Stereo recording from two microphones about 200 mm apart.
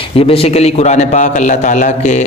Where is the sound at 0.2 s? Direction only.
30° left (ahead or behind).